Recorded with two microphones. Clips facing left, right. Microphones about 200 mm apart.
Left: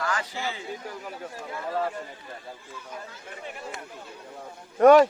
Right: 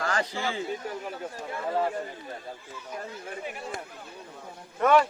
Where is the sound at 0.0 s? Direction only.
40° right (ahead or behind).